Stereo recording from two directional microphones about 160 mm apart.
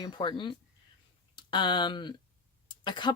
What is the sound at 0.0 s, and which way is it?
Speech, 30° left (ahead or behind).